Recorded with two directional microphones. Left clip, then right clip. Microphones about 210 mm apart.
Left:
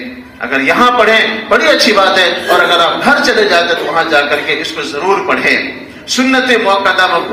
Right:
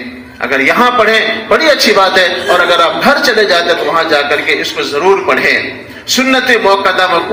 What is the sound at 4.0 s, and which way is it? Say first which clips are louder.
Speech: left 3 dB; 35° right (ahead or behind).